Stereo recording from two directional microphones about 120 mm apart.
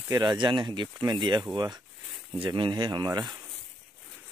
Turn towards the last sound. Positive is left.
turn(degrees=-35)  # may be behind; listen again after turning